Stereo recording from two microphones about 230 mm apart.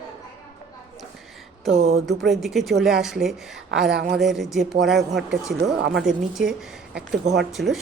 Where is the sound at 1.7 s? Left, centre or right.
Right.